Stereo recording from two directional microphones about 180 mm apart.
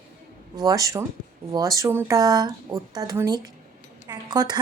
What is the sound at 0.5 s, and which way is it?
A woman's voice, 20° right (ahead or behind).